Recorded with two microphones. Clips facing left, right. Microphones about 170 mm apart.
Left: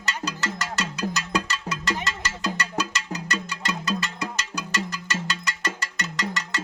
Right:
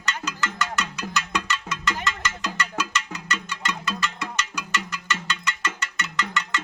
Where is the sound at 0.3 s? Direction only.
35° left (ahead or behind).